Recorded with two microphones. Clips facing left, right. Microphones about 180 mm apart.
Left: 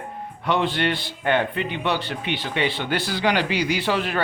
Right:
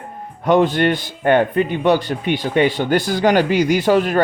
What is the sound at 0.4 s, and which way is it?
A man's voice, 45° right (ahead or behind).